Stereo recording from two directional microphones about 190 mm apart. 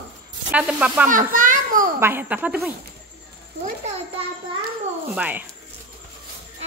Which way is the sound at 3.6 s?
35° right (ahead or behind).